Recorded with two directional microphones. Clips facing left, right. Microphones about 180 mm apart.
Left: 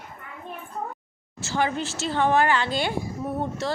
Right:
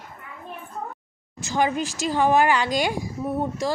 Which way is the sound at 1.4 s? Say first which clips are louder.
Right 2 dB; 15° right (ahead or behind).